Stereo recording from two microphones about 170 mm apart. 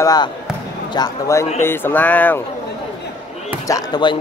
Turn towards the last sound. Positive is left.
turn(degrees=25)  # may be behind; listen again after turning